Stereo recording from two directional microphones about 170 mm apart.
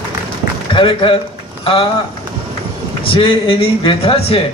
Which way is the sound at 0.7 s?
30° left (ahead or behind).